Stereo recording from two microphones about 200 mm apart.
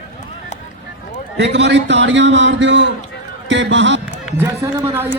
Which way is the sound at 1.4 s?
60° right (ahead or behind).